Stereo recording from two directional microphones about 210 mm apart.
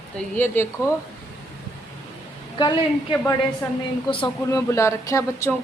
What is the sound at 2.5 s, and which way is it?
Speech, 20° left (ahead or behind).